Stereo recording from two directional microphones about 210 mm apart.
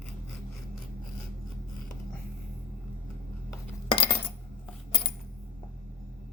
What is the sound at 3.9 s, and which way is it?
Coin, 25° left (ahead or behind).